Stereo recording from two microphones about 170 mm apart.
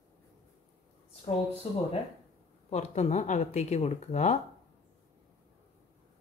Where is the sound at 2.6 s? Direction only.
40° left (ahead or behind).